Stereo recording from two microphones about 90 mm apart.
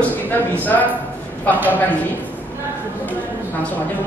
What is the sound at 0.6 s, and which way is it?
Speech, 20° left (ahead or behind).